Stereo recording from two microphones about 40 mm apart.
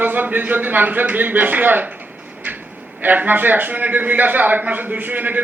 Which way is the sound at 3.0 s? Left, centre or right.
Right.